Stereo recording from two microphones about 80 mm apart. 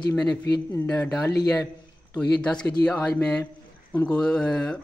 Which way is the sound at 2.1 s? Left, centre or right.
Centre.